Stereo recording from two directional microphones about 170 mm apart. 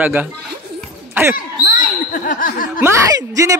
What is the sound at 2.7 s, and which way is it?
Speech, 15° right (ahead or behind).